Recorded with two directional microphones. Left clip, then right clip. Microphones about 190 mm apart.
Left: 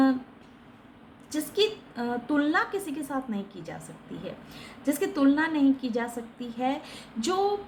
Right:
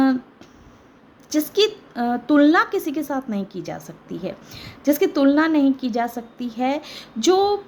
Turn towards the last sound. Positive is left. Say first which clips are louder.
# right 9 dB
turn(degrees=-45)  # may be behind; listen again after turning